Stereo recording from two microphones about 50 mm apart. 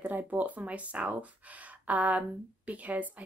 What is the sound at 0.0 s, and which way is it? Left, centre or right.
Speech, right.